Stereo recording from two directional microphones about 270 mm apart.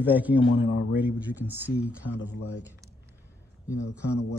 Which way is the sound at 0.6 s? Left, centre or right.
Left.